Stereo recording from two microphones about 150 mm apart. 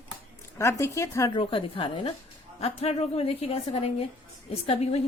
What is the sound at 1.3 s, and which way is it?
A woman's voice, 35° left (ahead or behind).